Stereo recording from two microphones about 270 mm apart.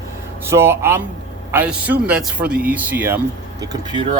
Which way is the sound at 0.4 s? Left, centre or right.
Centre.